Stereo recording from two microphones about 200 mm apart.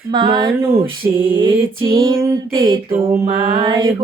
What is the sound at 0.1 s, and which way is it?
Mantra, 20° right (ahead or behind).